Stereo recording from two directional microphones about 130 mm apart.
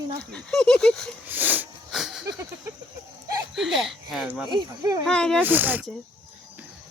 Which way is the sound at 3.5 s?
Centre (ahead or behind).